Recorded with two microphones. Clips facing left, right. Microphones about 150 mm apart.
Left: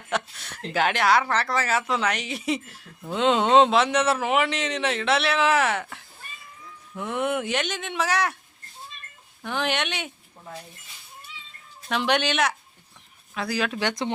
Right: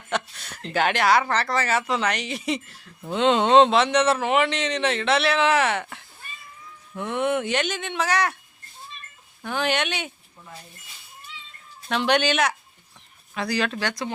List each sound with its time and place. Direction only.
0.1 s speech: centre (ahead or behind)
9.4 s speech: centre (ahead or behind)
11.9 s speech: centre (ahead or behind)
13.7 s speech: 20° left (ahead or behind)